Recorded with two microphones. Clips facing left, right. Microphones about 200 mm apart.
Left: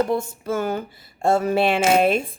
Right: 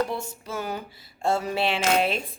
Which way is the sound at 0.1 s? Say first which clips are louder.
Left 9 dB; 50° left (ahead or behind).